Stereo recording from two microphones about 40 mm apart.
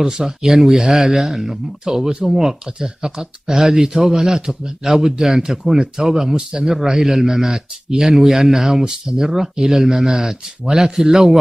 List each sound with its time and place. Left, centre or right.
0.2 s speech: centre